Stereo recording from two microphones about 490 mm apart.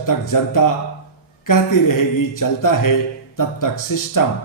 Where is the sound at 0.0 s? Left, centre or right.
Left.